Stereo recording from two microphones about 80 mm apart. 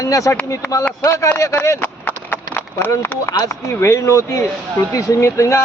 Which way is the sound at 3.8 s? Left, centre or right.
Left.